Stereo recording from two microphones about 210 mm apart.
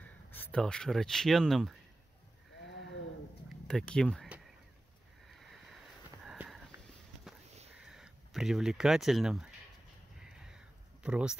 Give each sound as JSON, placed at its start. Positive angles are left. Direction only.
{"t": 0.0, "sound": "speech", "side_deg": 10}
{"t": 2.6, "sound": "sheep", "side_deg": 60}
{"t": 3.6, "sound": "speech", "side_deg": 5}
{"t": 5.3, "sound": "boat", "side_deg": 0}
{"t": 6.2, "sound": "sniff", "side_deg": -5}
{"t": 7.8, "sound": "speech", "side_deg": 0}
{"t": 10.4, "sound": "a sound", "side_deg": -5}